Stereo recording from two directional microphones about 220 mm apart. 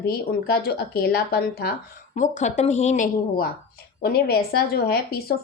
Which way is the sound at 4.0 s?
45° left (ahead or behind).